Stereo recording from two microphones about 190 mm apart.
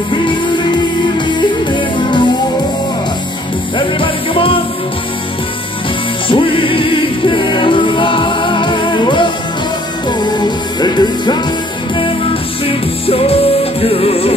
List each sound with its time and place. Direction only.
0.1 s music: 25° left (ahead or behind)
3.7 s music: 25° left (ahead or behind)
6.2 s music: 25° left (ahead or behind)
12.6 s music: 30° left (ahead or behind)